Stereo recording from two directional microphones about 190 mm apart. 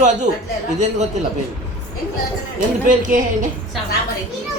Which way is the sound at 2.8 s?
40° right (ahead or behind).